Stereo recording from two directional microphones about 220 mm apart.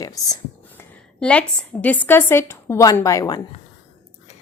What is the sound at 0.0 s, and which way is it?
A woman's voice, 15° left (ahead or behind).